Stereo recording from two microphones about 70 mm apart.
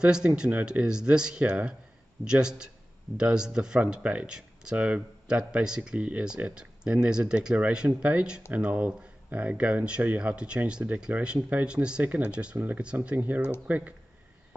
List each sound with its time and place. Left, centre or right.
0.0 s speech: centre